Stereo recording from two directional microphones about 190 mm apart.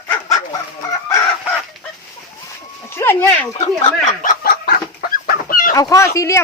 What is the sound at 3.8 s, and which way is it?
Chicken, 45° left (ahead or behind).